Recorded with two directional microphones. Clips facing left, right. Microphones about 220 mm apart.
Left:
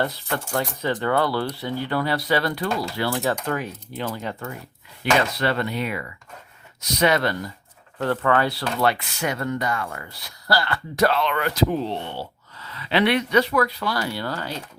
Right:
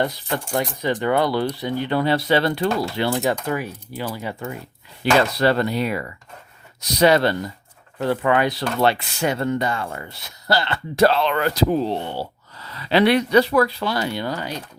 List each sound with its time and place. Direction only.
0.0 s speech: 15° right (ahead or behind)
3.4 s speech: 10° right (ahead or behind)
5.0 s speech: 35° right (ahead or behind)
7.9 s speech: 10° right (ahead or behind)